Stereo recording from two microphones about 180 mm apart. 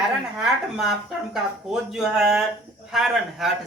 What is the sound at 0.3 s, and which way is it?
Speech, centre (ahead or behind).